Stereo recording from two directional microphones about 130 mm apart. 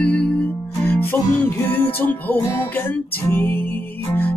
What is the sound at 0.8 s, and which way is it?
Music, 15° left (ahead or behind).